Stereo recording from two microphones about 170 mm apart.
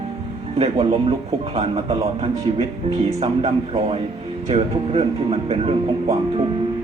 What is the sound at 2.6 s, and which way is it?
Speech, 40° right (ahead or behind).